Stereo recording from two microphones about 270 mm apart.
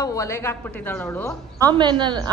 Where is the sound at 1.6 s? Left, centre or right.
Centre.